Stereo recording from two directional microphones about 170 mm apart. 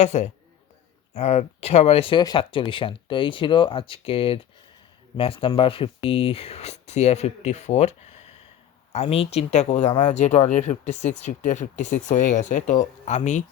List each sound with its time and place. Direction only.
0.0 s speech: 40° left (ahead or behind)